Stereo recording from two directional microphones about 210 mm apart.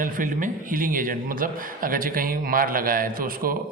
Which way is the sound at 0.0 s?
40° right (ahead or behind).